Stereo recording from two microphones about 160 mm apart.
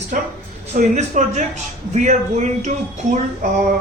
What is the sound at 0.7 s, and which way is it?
Speech, 45° right (ahead or behind).